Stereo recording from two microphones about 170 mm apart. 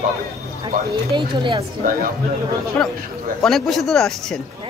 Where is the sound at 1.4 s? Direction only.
30° right (ahead or behind).